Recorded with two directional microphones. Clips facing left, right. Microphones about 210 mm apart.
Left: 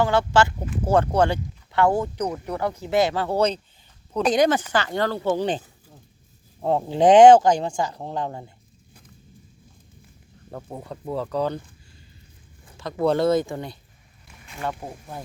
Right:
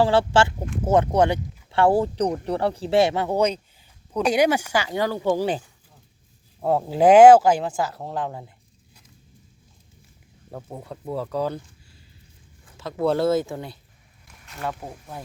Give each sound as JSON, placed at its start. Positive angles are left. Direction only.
{"t": 0.0, "sound": "speech", "side_deg": -30}
{"t": 10.5, "sound": "speech", "side_deg": 0}
{"t": 11.1, "sound": "speech", "side_deg": -5}
{"t": 12.7, "sound": "speech", "side_deg": -5}